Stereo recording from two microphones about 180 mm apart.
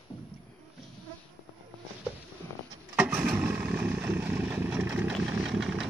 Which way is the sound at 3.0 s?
5° right (ahead or behind).